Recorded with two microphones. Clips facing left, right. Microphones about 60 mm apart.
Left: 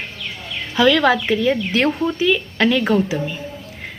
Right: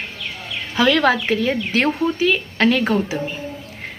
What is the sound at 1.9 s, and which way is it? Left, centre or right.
Speech, centre.